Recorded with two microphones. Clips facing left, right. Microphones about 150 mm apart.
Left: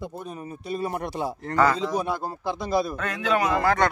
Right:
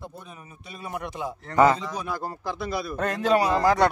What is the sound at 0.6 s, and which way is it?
Speech, 35° left (ahead or behind).